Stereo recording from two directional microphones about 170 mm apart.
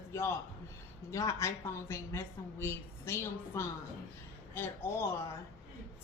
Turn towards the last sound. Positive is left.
turn(degrees=15)  # may be behind; listen again after turning